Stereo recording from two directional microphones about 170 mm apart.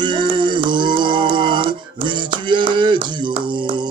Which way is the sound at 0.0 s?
25° right (ahead or behind).